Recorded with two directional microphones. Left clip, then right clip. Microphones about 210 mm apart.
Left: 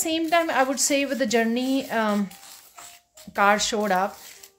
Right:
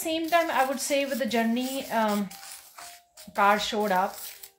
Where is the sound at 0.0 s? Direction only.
50° left (ahead or behind).